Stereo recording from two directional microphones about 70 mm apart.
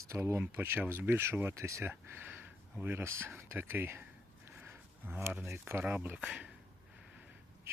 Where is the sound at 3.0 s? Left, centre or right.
Right.